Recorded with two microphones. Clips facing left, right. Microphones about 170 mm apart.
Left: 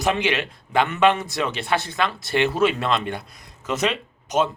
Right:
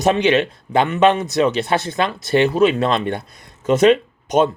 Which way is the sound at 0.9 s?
20° right (ahead or behind).